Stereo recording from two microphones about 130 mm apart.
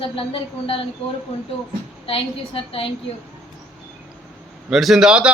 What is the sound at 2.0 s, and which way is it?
Speech, 45° left (ahead or behind).